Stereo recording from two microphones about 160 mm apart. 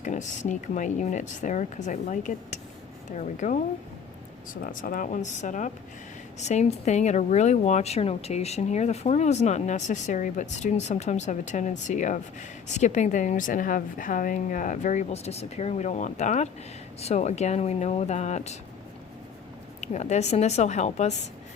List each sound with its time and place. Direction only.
0.0 s speech: 50° left (ahead or behind)
4.6 s speech: 60° left (ahead or behind)
19.8 s speech: 45° left (ahead or behind)